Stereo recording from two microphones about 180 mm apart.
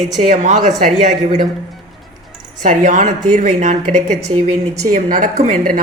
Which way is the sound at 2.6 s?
45° right (ahead or behind).